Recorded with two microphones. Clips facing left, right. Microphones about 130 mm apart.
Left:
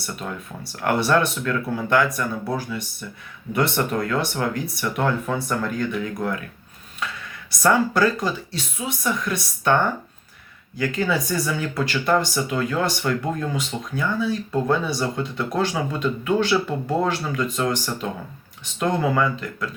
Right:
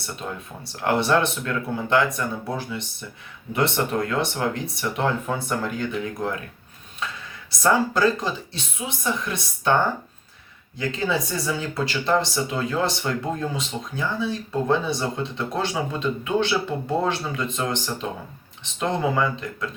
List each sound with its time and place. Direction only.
0.6 s speech: 25° right (ahead or behind)
7.6 s speech: 25° right (ahead or behind)
10.8 s speech: 25° right (ahead or behind)